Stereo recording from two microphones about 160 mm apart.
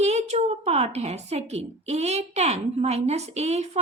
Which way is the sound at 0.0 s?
45° right (ahead or behind).